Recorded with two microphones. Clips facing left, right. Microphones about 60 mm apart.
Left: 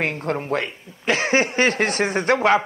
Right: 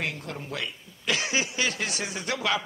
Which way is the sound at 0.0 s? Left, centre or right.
Left.